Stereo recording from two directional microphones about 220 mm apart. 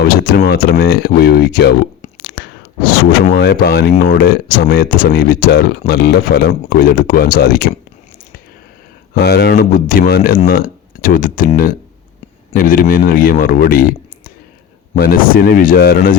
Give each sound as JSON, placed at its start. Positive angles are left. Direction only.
{"t": 0.1, "sound": "speech", "side_deg": 45}
{"t": 2.4, "sound": "a sound", "side_deg": 45}
{"t": 3.1, "sound": "speech", "side_deg": 45}
{"t": 9.1, "sound": "speech", "side_deg": 45}
{"t": 14.9, "sound": "speech", "side_deg": 40}